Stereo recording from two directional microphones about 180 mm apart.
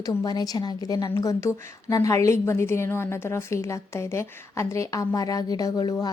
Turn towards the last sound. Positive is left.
turn(degrees=20)  # may be behind; listen again after turning